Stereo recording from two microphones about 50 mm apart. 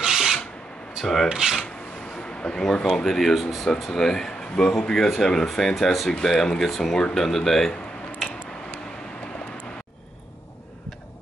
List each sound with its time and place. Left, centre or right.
0.0 s filing: centre
1.0 s speech: centre
1.3 s filing: centre
2.4 s speech: centre
6.4 s speech: centre